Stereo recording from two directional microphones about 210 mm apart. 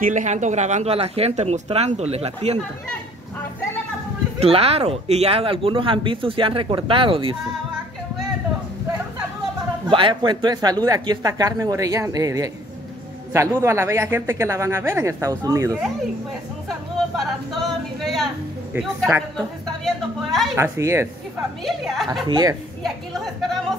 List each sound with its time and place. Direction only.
0.0 s speech: 35° right (ahead or behind)
4.4 s speech: 30° right (ahead or behind)
9.8 s speech: 25° right (ahead or behind)
17.2 s speech: centre (ahead or behind)
20.5 s speech: 10° right (ahead or behind)
21.6 s speech: centre (ahead or behind)
22.3 s speech: 20° right (ahead or behind)
22.8 s speech: centre (ahead or behind)